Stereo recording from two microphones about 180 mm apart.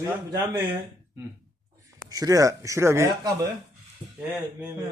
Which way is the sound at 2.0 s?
20° right (ahead or behind).